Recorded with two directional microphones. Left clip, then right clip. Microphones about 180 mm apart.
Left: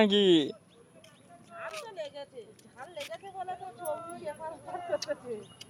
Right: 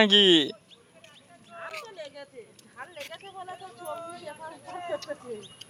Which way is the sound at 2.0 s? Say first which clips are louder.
Left 1 dB; 40° right (ahead or behind).